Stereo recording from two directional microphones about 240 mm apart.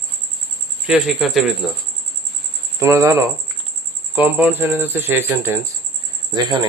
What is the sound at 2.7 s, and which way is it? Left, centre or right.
Speech, centre.